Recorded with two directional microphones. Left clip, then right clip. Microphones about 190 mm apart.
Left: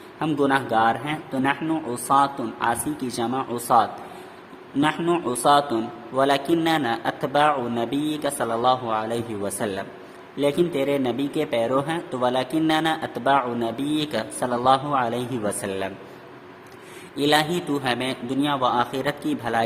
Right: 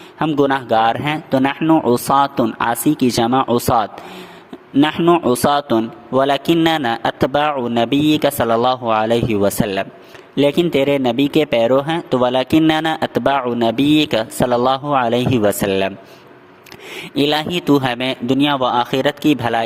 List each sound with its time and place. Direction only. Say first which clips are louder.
0.3 s speech: right 6 dB; 40° right (ahead or behind)
17.2 s speech: right 3 dB; 45° right (ahead or behind)